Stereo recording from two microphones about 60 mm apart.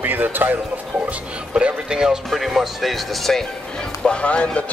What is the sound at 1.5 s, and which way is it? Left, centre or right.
Speech, centre.